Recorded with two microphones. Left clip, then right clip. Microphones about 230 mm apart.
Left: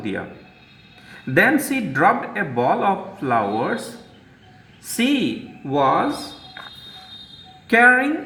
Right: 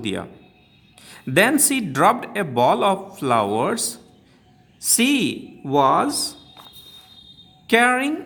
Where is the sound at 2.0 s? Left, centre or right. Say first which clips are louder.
Even; right.